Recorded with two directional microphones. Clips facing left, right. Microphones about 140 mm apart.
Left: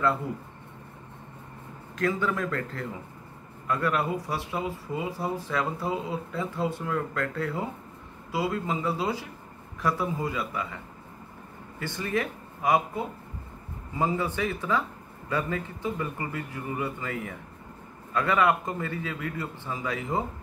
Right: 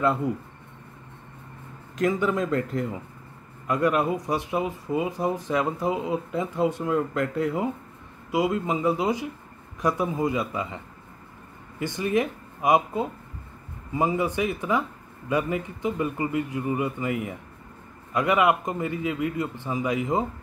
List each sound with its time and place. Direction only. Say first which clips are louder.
0.0 s speech: right 3 dB; 20° right (ahead or behind)
2.0 s speech: right 4 dB; 20° right (ahead or behind)
11.8 s speech: right 5 dB; 15° right (ahead or behind)